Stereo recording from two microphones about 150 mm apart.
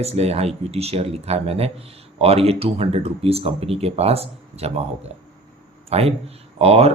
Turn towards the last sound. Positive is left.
turn(degrees=-45)  # may be behind; listen again after turning